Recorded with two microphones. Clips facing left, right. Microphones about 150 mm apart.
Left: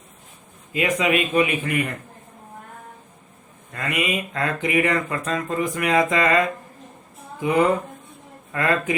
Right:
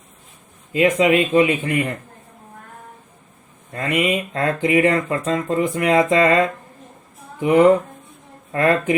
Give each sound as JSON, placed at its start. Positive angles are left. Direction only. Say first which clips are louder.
{"t": 0.7, "sound": "speech", "louder": "right 6 dB", "side_deg": -25}
{"t": 3.7, "sound": "speech", "louder": "right 5 dB", "side_deg": -25}
{"t": 8.5, "sound": "speech", "louder": "right 5 dB", "side_deg": -25}